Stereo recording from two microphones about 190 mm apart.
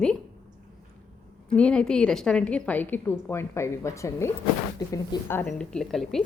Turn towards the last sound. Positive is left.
turn(degrees=0)  # may be behind; listen again after turning